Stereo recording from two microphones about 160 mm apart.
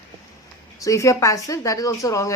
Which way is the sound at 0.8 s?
20° left (ahead or behind).